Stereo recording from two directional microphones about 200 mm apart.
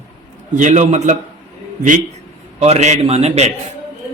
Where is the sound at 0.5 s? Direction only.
35° right (ahead or behind).